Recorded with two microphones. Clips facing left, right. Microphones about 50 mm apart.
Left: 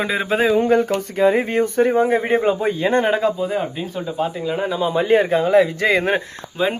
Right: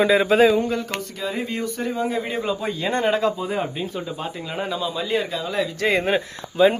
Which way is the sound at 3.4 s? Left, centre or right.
Centre.